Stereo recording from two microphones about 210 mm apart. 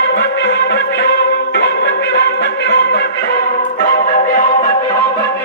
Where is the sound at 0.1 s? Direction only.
55° left (ahead or behind).